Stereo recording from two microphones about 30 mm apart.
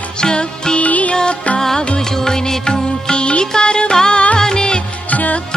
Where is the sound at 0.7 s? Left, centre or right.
Left.